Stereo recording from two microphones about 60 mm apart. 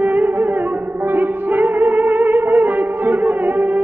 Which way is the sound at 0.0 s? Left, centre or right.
Right.